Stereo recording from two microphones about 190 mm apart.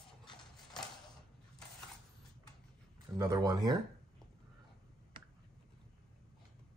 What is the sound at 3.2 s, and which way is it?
Speech, 20° right (ahead or behind).